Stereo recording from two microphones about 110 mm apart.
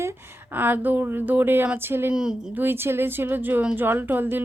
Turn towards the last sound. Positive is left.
turn(degrees=-20)  # may be behind; listen again after turning